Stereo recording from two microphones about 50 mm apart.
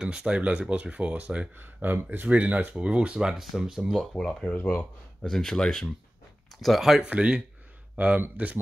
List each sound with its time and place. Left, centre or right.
0.0 s speech: centre
1.6 s speech: right
3.2 s speech: centre
4.1 s speech: centre
4.6 s speech: left
5.2 s speech: centre
7.1 s speech: right